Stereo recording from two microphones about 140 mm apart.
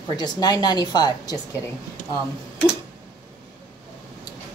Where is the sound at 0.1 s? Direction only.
30° left (ahead or behind).